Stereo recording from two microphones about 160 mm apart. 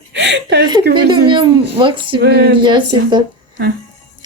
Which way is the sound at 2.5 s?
30° right (ahead or behind).